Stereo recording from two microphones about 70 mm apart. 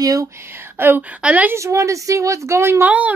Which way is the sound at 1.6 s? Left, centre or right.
Right.